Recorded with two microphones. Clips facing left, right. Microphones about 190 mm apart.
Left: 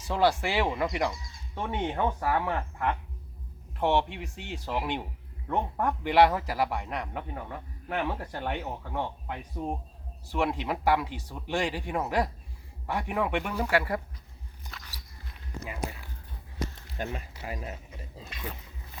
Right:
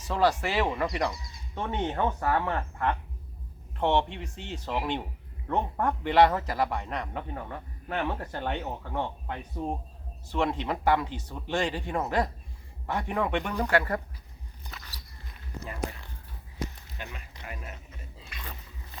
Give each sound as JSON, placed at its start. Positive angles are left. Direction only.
{"t": 0.1, "sound": "a man's voice", "side_deg": 10}
{"t": 14.7, "sound": "walk", "side_deg": 0}
{"t": 15.6, "sound": "speech", "side_deg": 10}
{"t": 17.0, "sound": "speech", "side_deg": 40}